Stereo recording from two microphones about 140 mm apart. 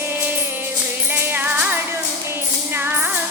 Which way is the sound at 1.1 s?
15° right (ahead or behind).